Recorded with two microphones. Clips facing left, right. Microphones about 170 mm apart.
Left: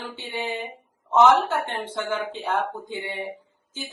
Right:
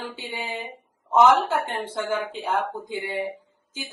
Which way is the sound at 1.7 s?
10° right (ahead or behind).